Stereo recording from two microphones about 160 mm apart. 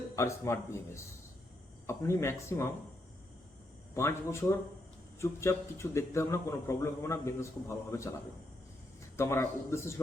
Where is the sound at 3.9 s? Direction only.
15° left (ahead or behind).